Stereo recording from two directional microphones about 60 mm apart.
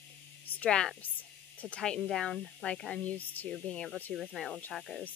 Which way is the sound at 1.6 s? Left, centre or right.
Centre.